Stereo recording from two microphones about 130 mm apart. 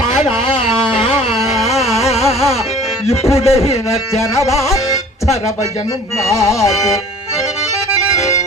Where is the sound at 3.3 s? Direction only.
50° left (ahead or behind).